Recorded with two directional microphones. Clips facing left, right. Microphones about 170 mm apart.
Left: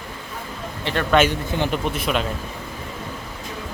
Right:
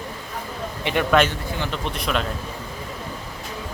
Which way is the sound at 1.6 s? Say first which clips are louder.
Left 5 dB; 10° left (ahead or behind).